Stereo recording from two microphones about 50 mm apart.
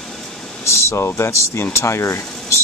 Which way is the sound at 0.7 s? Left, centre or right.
Left.